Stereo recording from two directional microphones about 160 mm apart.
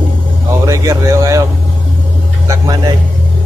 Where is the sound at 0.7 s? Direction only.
20° right (ahead or behind).